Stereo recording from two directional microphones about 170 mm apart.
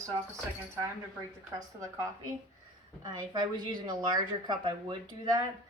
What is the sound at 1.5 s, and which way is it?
A woman's voice, 20° right (ahead or behind).